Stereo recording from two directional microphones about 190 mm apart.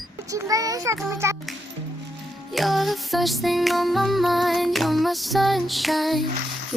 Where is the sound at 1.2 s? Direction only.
15° right (ahead or behind).